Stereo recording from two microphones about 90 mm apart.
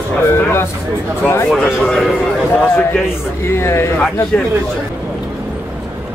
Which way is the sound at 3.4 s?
30° left (ahead or behind).